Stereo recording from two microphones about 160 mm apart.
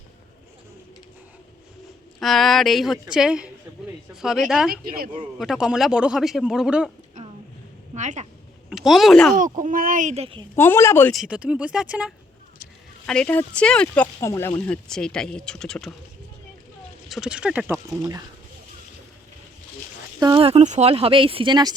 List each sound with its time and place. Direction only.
2.1 s speech: centre (ahead or behind)
4.7 s speech: 70° right (ahead or behind)
5.4 s speech: 5° right (ahead or behind)
7.2 s a sound: 50° right (ahead or behind)
7.9 s speech: 50° right (ahead or behind)
8.7 s speech: centre (ahead or behind)
9.4 s speech: 55° right (ahead or behind)
10.5 s speech: 15° left (ahead or behind)
11.1 s speech: 5° right (ahead or behind)
13.1 s speech: 5° left (ahead or behind)
17.1 s speech: 5° right (ahead or behind)
18.0 s speech: 25° right (ahead or behind)
20.1 s speech: 25° right (ahead or behind)
20.4 s speech: 40° right (ahead or behind)